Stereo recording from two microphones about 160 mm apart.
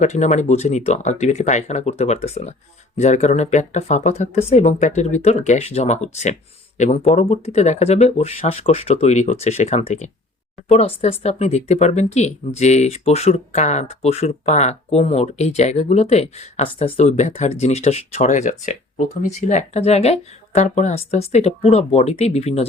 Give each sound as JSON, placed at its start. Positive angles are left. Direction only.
{"t": 0.0, "sound": "speech", "side_deg": 45}